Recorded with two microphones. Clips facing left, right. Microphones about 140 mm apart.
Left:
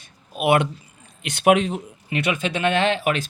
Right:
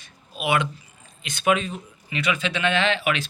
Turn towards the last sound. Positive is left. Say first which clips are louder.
# left 3 dB
turn(degrees=45)  # may be behind; listen again after turning